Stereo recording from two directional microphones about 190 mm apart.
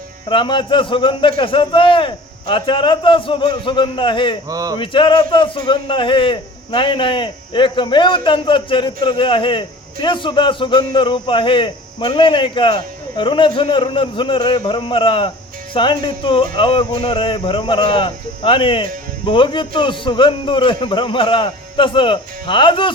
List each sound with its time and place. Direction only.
0.3 s a man's voice: 25° left (ahead or behind)
4.4 s speech: 20° right (ahead or behind)
4.8 s a man's voice: 25° left (ahead or behind)